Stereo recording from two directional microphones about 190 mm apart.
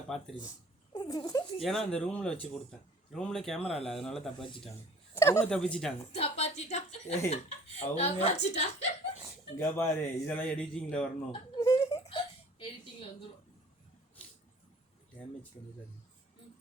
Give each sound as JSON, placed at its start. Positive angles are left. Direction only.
{"t": 0.1, "sound": "speech", "side_deg": 0}
{"t": 0.9, "sound": "speech", "side_deg": 20}
{"t": 1.6, "sound": "speech", "side_deg": 0}
{"t": 5.1, "sound": "speech", "side_deg": 15}
{"t": 6.1, "sound": "a woman's voice", "side_deg": 30}
{"t": 9.6, "sound": "a man's voice", "side_deg": 15}
{"t": 11.3, "sound": "a sound", "side_deg": 20}
{"t": 12.0, "sound": "hiccup", "side_deg": 30}